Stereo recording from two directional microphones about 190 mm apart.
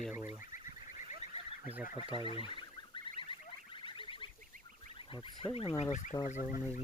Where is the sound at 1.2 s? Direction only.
35° left (ahead or behind).